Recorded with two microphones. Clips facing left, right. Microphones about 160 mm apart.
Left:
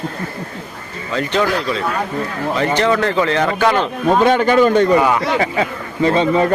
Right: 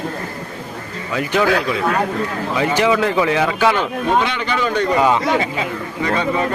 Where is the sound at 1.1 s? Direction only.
10° right (ahead or behind).